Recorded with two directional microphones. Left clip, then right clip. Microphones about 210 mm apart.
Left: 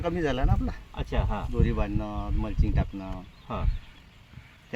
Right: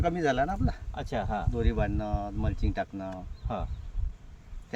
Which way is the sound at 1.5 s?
10° right (ahead or behind).